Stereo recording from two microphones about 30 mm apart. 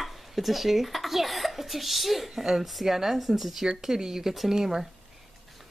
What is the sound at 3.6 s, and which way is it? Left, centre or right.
A woman's voice, right.